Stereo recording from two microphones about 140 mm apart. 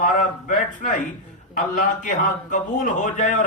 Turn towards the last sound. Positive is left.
turn(degrees=65)  # may be behind; listen again after turning